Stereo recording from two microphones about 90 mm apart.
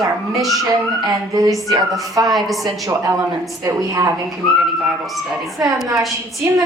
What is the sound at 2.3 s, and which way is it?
Speech, centre (ahead or behind).